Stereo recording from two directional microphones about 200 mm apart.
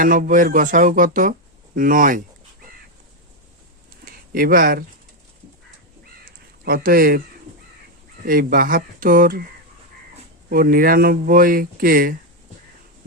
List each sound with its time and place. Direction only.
0.0 s speech: 45° right (ahead or behind)
4.0 s speech: 45° right (ahead or behind)
6.7 s speech: 50° right (ahead or behind)
8.2 s speech: 45° right (ahead or behind)
10.5 s speech: 45° right (ahead or behind)